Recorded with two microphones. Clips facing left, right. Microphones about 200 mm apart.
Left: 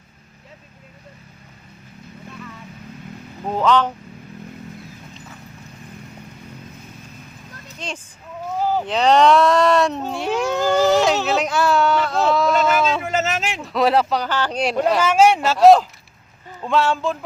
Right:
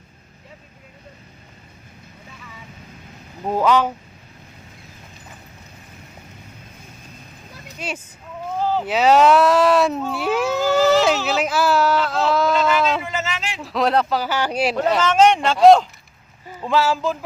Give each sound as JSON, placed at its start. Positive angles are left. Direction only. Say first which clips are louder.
{"t": 3.4, "sound": "speech", "louder": "even", "side_deg": -10}
{"t": 7.5, "sound": "vehicle", "louder": "right 2 dB", "side_deg": -10}
{"t": 8.6, "sound": "vehicle", "louder": "even", "side_deg": 15}
{"t": 8.9, "sound": "speech", "louder": "right 1 dB", "side_deg": -5}
{"t": 13.1, "sound": "a sound", "louder": "left 5 dB", "side_deg": 45}
{"t": 13.6, "sound": "speech", "louder": "left 1 dB", "side_deg": 0}